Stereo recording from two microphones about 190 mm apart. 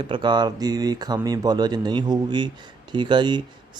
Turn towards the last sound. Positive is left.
turn(degrees=-25)  # may be behind; listen again after turning